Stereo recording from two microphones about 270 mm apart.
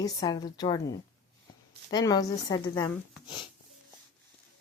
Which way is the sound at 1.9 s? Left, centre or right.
Centre.